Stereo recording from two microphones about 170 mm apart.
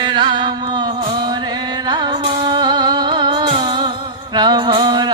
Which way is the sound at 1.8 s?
25° right (ahead or behind).